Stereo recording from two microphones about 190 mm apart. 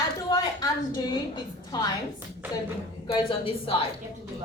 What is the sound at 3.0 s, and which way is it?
Speech, 30° left (ahead or behind).